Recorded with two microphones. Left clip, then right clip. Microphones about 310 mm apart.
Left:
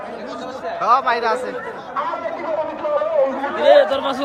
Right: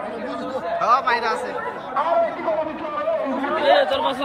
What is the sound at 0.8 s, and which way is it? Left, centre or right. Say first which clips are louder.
Speech: left 3 dB; centre.